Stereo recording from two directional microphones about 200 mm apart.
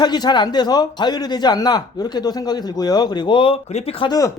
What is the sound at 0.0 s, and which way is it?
A man's voice, 20° left (ahead or behind).